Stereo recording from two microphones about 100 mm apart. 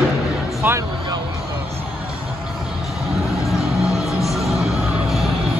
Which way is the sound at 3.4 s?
Centre (ahead or behind).